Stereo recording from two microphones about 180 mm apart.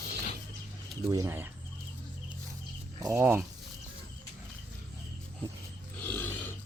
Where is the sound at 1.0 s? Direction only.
20° right (ahead or behind).